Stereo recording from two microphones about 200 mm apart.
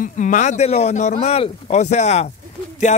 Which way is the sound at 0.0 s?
40° left (ahead or behind).